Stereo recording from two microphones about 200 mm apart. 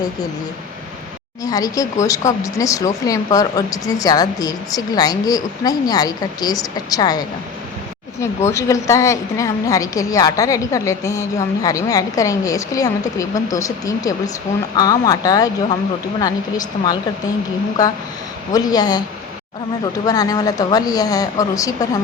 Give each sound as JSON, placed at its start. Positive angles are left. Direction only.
{"t": 1.5, "sound": "speech", "side_deg": 20}
{"t": 8.4, "sound": "speech", "side_deg": 15}